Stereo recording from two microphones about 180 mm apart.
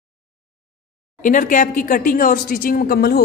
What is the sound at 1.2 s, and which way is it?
A woman's voice, 50° left (ahead or behind).